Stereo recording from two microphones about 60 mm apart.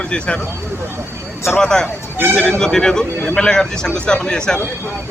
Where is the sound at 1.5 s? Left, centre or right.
Centre.